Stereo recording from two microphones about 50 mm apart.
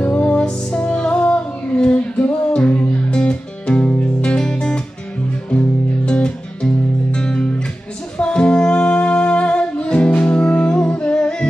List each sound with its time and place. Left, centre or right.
0.0 s music: left